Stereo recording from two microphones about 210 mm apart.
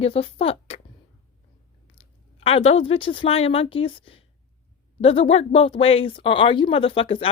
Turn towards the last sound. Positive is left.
turn(degrees=25)  # may be behind; listen again after turning